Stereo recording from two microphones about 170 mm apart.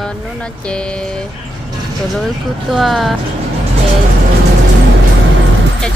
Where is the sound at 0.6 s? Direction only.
5° left (ahead or behind).